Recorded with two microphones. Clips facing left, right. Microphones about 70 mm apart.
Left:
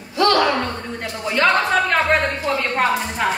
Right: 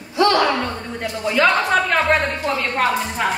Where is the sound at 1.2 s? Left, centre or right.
Centre.